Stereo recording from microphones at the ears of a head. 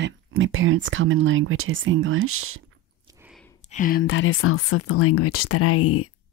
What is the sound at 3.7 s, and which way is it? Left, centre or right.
Speech, left.